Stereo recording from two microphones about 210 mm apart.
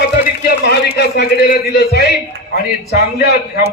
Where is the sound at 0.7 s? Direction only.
50° left (ahead or behind).